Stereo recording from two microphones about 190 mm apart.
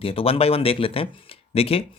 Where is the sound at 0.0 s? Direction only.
30° left (ahead or behind).